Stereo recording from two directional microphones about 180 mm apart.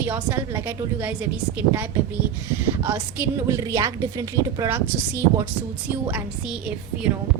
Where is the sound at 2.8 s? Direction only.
10° right (ahead or behind).